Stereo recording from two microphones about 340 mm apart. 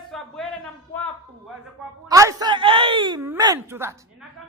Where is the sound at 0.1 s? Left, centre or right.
Centre.